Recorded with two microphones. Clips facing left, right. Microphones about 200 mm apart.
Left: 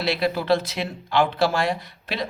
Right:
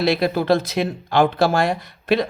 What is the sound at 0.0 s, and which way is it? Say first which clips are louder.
Speech: right 5 dB; 45° right (ahead or behind).